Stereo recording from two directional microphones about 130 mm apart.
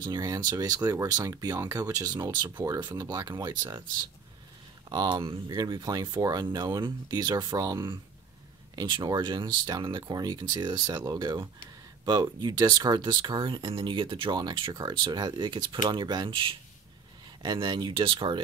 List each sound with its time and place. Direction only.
0.0 s speech: 30° right (ahead or behind)